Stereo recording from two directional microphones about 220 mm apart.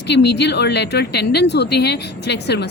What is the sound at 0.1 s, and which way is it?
A woman's voice, 50° left (ahead or behind).